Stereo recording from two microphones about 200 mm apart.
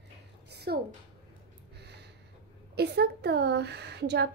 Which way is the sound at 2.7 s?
55° right (ahead or behind).